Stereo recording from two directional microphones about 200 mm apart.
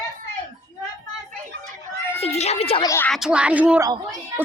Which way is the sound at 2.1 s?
30° left (ahead or behind).